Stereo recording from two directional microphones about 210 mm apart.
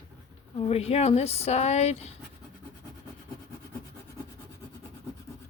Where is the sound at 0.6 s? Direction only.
30° left (ahead or behind).